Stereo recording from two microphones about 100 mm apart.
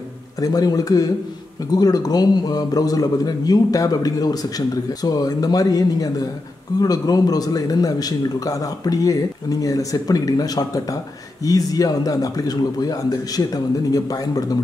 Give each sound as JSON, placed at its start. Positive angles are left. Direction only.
{"t": 0.4, "sound": "a man's voice", "side_deg": 40}